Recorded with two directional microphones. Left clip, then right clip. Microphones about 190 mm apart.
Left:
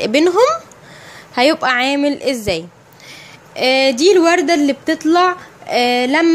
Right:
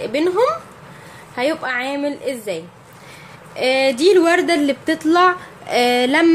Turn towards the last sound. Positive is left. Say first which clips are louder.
# left 1 dB
turn(degrees=15)  # may be behind; listen again after turning